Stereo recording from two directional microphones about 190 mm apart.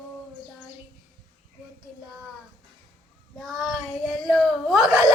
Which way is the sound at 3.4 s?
Centre (ahead or behind).